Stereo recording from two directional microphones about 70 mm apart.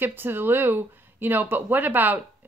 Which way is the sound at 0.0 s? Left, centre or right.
Right.